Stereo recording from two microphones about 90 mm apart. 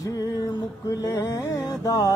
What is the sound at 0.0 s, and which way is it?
Music, 40° left (ahead or behind).